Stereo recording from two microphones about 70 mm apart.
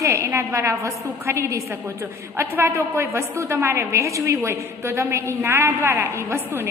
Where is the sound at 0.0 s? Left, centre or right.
Right.